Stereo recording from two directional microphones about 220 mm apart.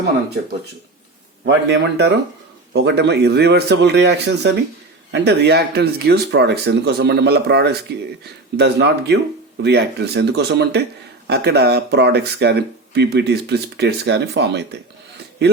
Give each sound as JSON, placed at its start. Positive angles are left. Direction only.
{"t": 1.5, "sound": "speech", "side_deg": -50}